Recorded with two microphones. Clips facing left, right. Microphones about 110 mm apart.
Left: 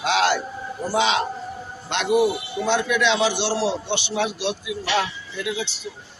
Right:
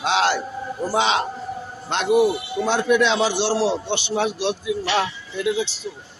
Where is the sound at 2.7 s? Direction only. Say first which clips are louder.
Right 2 dB; 40° right (ahead or behind).